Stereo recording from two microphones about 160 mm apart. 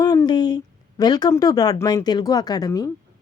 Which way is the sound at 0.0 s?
25° left (ahead or behind).